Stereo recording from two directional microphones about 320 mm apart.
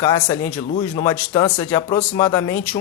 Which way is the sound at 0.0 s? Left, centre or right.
Centre.